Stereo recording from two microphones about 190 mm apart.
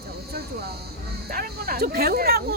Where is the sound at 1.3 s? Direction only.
50° right (ahead or behind).